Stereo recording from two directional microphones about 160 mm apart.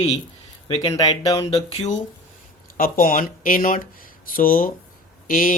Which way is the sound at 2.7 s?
60° left (ahead or behind).